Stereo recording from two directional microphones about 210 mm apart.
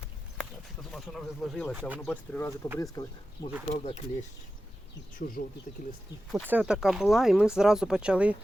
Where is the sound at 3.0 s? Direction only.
20° left (ahead or behind).